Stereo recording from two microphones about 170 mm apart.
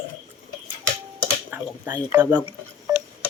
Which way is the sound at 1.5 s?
10° right (ahead or behind).